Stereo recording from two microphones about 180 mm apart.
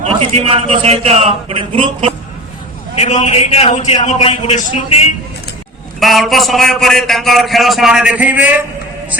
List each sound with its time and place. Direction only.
0.0 s a man's voice: 35° right (ahead or behind)
3.0 s a man's voice: 40° left (ahead or behind)
6.0 s a man's voice: centre (ahead or behind)